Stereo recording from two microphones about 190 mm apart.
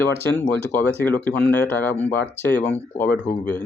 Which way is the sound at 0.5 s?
10° left (ahead or behind).